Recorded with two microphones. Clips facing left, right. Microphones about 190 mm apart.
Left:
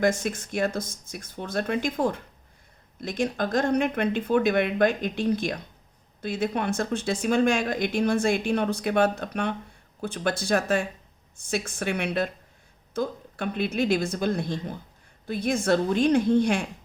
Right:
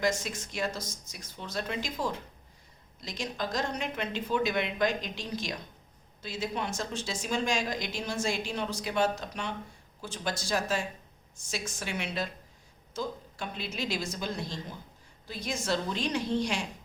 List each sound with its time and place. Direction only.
0.0 s speech: 55° left (ahead or behind)